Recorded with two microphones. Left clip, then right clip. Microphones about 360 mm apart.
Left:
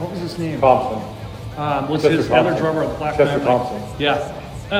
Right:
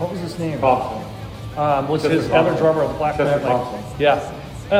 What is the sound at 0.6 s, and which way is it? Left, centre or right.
Speech, left.